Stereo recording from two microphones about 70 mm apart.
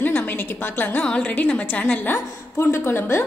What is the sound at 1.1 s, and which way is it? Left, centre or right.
A woman's voice, centre.